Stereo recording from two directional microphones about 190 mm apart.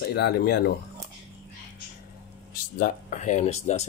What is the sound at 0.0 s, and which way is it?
Speech, 55° left (ahead or behind).